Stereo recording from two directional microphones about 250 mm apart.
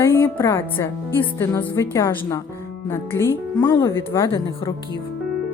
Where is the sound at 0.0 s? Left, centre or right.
Centre.